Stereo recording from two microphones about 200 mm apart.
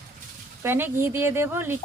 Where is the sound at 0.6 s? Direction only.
10° right (ahead or behind).